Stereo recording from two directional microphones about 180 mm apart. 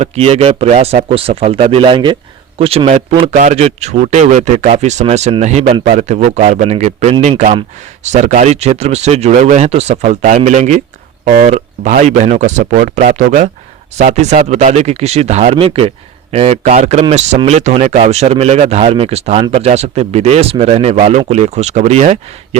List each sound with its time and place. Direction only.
0.0 s speech: 35° right (ahead or behind)